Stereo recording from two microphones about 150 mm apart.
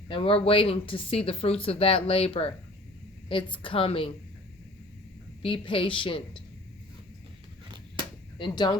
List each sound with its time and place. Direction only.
0.1 s speech: 40° left (ahead or behind)
5.4 s speech: 35° left (ahead or behind)
8.4 s speech: 30° left (ahead or behind)